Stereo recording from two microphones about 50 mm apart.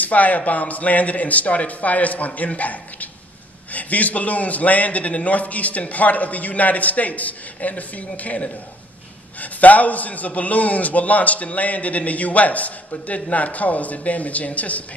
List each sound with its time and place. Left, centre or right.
0.0 s a man's voice: left